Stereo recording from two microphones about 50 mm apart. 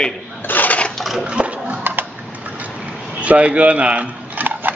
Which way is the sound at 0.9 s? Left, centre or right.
Centre.